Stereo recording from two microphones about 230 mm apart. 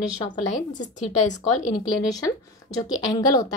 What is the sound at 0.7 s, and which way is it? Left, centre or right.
Speech, left.